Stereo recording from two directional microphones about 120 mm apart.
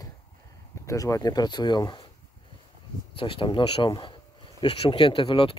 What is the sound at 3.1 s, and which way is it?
Speech, 45° left (ahead or behind).